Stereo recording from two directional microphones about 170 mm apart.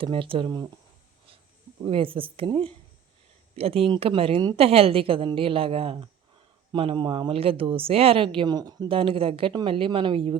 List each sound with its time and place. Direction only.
0.0 s speech: 30° right (ahead or behind)
1.8 s speech: 30° right (ahead or behind)